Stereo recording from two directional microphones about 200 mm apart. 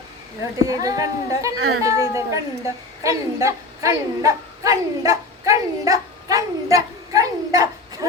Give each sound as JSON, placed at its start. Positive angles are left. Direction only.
{"t": 0.7, "sound": "speech", "side_deg": -15}
{"t": 1.5, "sound": "speech", "side_deg": -90}
{"t": 1.8, "sound": "a woman's voice", "side_deg": -15}